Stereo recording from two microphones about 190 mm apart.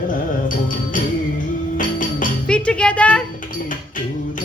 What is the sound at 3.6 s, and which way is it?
Music, 45° left (ahead or behind).